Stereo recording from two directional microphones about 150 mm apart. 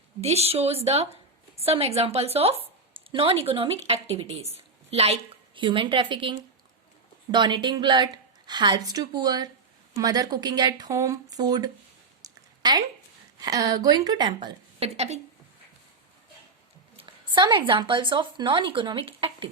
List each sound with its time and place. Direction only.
0.2 s a woman's voice: 45° right (ahead or behind); by 11.7 s 25° right (ahead or behind)
12.2 s a sound: 25° right (ahead or behind)
13.4 s a woman's voice: 25° right (ahead or behind)
14.9 s speech: 45° right (ahead or behind)
17.0 s speech: 30° right (ahead or behind)